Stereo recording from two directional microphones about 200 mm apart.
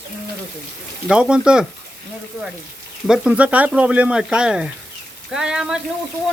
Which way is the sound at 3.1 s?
5° right (ahead or behind).